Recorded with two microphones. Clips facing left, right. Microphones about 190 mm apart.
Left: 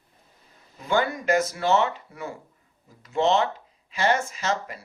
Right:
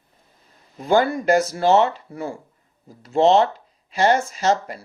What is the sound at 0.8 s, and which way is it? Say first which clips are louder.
Speech: right 6 dB; 35° right (ahead or behind).